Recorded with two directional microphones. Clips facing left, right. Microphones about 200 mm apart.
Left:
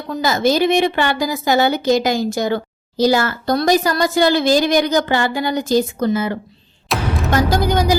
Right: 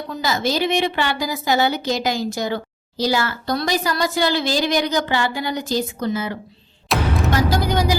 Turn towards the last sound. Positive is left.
turn(degrees=45)  # may be behind; listen again after turning